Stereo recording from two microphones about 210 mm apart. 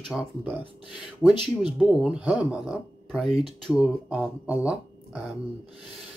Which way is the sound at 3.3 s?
30° right (ahead or behind).